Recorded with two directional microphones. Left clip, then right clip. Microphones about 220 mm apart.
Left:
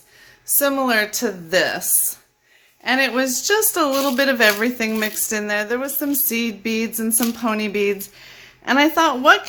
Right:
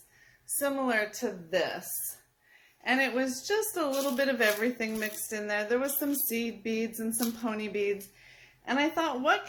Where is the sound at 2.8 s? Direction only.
20° left (ahead or behind).